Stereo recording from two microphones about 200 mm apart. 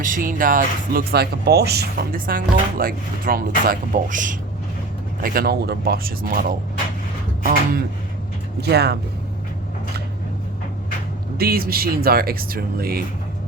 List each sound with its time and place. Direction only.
0.0 s speech: 45° right (ahead or behind)
8.6 s speech: 55° right (ahead or behind)
11.3 s speech: 50° right (ahead or behind)